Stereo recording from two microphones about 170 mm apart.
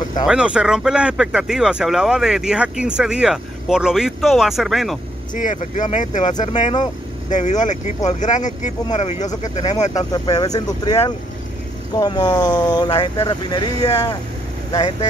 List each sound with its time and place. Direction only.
0.3 s speech: 5° right (ahead or behind)
5.3 s speech: 50° left (ahead or behind)
9.9 s speech: 20° left (ahead or behind)